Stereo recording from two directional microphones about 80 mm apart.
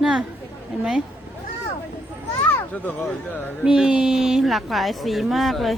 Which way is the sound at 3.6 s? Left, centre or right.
Centre.